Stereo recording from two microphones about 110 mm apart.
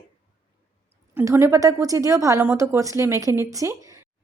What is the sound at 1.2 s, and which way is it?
A woman's voice, 25° right (ahead or behind).